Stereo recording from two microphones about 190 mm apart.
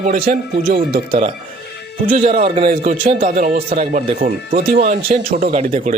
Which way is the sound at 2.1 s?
40° right (ahead or behind).